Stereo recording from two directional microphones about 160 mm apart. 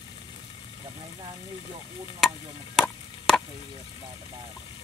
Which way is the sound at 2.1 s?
5° left (ahead or behind).